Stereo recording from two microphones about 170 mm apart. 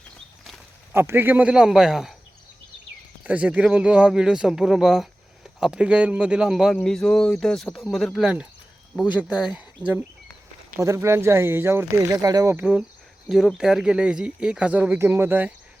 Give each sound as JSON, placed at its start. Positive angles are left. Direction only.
{"t": 0.9, "sound": "a man's voice", "side_deg": -15}
{"t": 3.2, "sound": "a man's voice", "side_deg": -10}
{"t": 12.5, "sound": "speech", "side_deg": -10}